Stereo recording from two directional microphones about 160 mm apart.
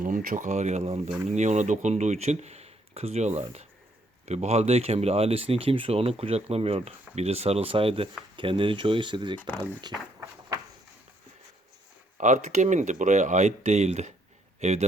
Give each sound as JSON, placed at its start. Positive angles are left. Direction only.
{"t": 0.0, "sound": "speech", "side_deg": -55}
{"t": 12.1, "sound": "speech", "side_deg": -50}